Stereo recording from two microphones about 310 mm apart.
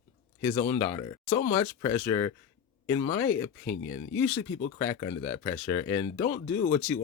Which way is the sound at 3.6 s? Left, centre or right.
Left.